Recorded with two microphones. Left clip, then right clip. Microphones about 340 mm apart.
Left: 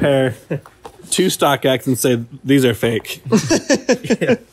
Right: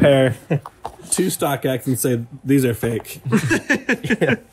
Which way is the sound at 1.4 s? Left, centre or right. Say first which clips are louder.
Left 6 dB; centre.